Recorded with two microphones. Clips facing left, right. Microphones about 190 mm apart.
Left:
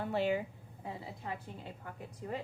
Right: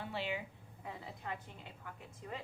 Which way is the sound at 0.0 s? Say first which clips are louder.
Left 8 dB; 45° left (ahead or behind).